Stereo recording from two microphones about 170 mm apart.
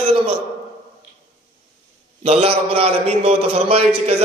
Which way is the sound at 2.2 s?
35° right (ahead or behind).